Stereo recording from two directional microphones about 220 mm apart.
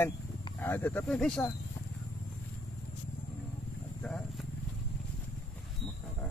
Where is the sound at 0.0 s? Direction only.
10° left (ahead or behind).